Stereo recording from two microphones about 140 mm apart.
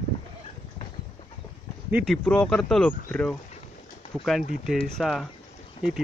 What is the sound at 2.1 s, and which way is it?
Speech, 5° left (ahead or behind).